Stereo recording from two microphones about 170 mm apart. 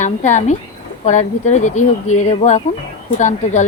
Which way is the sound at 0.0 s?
45° left (ahead or behind).